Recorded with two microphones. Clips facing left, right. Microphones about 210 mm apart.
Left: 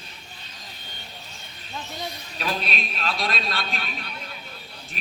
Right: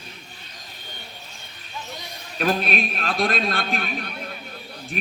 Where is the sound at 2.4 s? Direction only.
50° right (ahead or behind).